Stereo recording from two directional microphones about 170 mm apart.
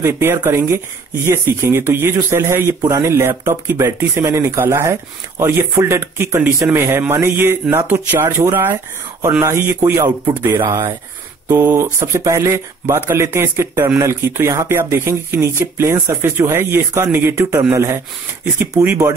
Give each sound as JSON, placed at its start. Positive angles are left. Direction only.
{"t": 0.0, "sound": "speech", "side_deg": -15}